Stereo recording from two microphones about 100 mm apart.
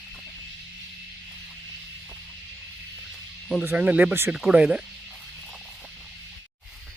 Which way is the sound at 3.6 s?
15° right (ahead or behind).